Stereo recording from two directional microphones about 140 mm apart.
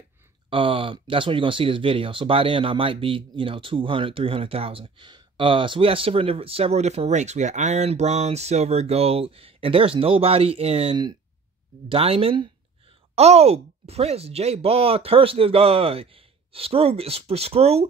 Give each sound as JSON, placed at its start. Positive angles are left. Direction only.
{"t": 0.5, "sound": "speech", "side_deg": -40}